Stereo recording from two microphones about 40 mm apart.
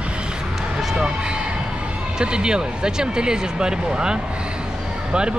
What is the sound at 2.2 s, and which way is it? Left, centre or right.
Speech, right.